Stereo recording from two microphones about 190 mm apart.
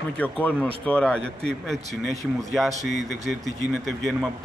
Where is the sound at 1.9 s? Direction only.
35° right (ahead or behind).